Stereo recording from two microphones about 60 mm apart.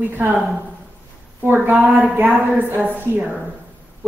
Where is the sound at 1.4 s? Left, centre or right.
Right.